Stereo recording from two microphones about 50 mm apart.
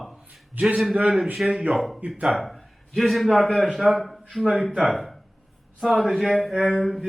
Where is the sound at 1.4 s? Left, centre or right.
Centre.